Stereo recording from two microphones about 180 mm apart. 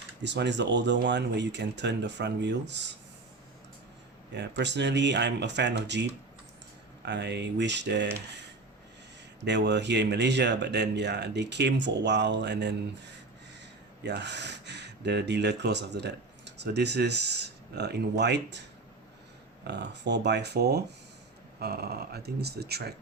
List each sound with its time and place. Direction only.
0.2 s speech: 75° right (ahead or behind)
4.4 s speech: 75° right (ahead or behind)
9.4 s speech: 75° right (ahead or behind)
14.0 s speech: 70° right (ahead or behind)
19.6 s speech: 70° right (ahead or behind)